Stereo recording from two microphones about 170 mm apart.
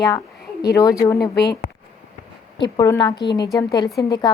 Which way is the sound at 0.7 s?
20° left (ahead or behind).